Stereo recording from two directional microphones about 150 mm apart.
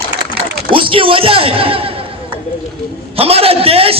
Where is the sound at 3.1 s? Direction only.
40° right (ahead or behind).